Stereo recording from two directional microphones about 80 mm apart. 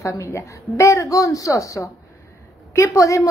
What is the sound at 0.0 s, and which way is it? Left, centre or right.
A woman's voice, left.